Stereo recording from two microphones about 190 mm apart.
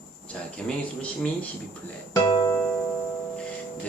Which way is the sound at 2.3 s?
20° left (ahead or behind).